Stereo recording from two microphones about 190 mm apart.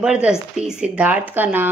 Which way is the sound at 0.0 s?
5° right (ahead or behind).